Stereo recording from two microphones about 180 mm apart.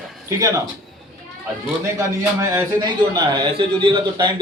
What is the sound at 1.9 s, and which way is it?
A man's voice, 15° right (ahead or behind).